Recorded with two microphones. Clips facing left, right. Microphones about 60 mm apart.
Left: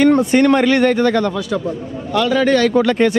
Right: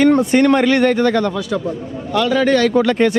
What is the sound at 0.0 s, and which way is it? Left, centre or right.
A man's voice, centre.